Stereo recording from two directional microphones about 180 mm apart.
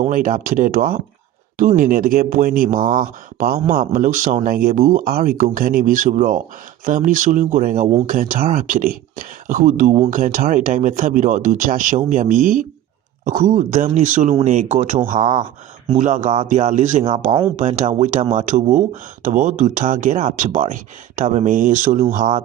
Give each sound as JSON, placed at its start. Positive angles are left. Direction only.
{"t": 0.1, "sound": "speech", "side_deg": -50}
{"t": 15.2, "sound": "speech", "side_deg": -25}
{"t": 15.9, "sound": "speech", "side_deg": -45}